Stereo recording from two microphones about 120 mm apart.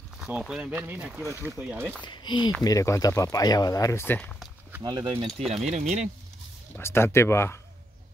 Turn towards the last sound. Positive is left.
turn(degrees=20)  # may be behind; listen again after turning